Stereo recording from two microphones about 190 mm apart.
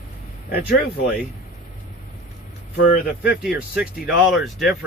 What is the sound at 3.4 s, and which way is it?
Speech, 5° right (ahead or behind).